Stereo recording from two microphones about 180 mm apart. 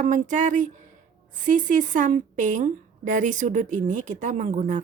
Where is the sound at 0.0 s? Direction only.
45° right (ahead or behind).